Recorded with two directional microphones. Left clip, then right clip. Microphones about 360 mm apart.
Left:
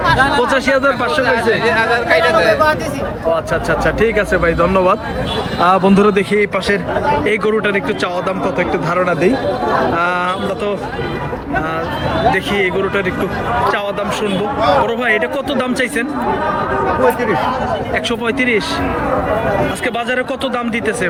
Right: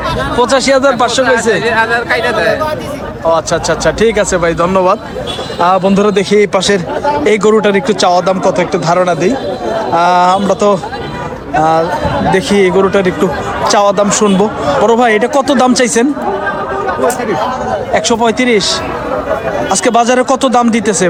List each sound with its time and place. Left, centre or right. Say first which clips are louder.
0.5 s speech: right 4 dB; centre
1.2 s speech: right 3 dB; right
3.3 s a man's voice: right 4 dB; centre
12.3 s speech: right 6 dB; centre
17.9 s speech: right 10 dB; centre
19.8 s speech: right 8 dB; centre